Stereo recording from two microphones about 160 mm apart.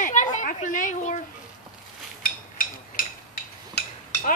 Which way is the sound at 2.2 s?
60° left (ahead or behind).